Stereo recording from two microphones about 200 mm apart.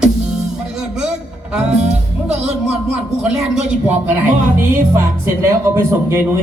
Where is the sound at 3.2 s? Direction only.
5° right (ahead or behind).